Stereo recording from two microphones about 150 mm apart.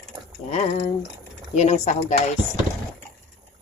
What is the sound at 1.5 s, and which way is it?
Speech, 45° left (ahead or behind).